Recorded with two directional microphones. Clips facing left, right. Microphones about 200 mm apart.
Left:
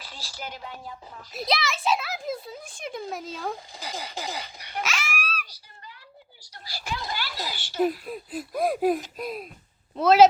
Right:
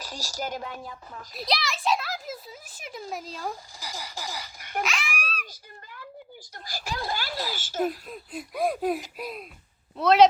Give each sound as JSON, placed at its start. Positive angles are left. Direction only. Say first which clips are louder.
{"t": 0.0, "sound": "speech", "louder": "right 6 dB", "side_deg": -45}
{"t": 1.3, "sound": "a child's voice", "louder": "left 2 dB", "side_deg": 0}
{"t": 4.1, "sound": "speech", "louder": "left 3 dB", "side_deg": 20}
{"t": 4.8, "sound": "a sound", "louder": "right 1 dB", "side_deg": 0}
{"t": 5.5, "sound": "a sound", "louder": "right 2 dB", "side_deg": -50}
{"t": 7.5, "sound": "speech", "louder": "left 4 dB", "side_deg": -45}
{"t": 7.9, "sound": "a child's voice", "louder": "left 3 dB", "side_deg": 5}